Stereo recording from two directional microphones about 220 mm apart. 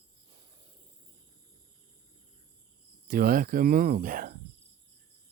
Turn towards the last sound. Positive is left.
turn(degrees=-40)  # may be behind; listen again after turning